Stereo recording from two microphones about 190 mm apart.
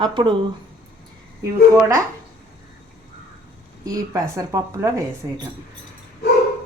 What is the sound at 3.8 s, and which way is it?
Speech, 20° right (ahead or behind).